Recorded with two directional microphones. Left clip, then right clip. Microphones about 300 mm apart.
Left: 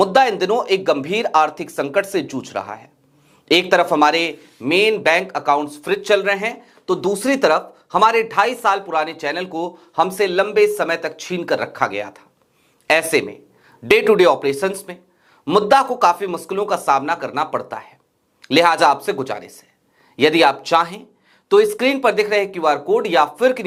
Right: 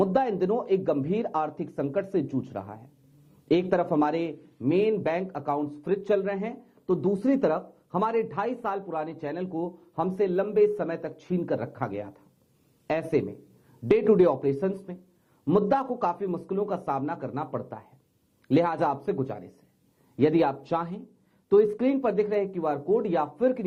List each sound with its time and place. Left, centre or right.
0.1 s a man's voice: centre
9.5 s speech: left
10.0 s a man's voice: centre
20.1 s a man's voice: centre